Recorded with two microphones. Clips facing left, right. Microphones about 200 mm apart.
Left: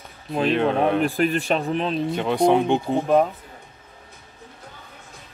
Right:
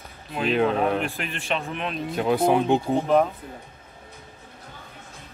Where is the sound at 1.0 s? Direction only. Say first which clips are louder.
Left 9 dB; 40° left (ahead or behind).